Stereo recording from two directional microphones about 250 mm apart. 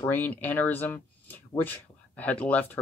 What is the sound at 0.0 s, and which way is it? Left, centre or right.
Speech, centre.